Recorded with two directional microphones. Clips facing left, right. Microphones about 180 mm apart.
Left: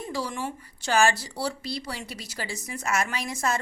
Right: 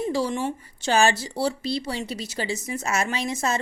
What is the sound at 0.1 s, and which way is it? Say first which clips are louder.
A woman's voice: right 6 dB; 25° right (ahead or behind).